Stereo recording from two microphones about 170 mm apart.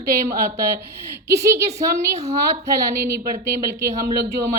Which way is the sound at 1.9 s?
40° right (ahead or behind).